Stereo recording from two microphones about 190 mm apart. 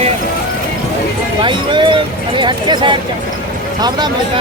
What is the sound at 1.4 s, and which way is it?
Speech, 25° right (ahead or behind).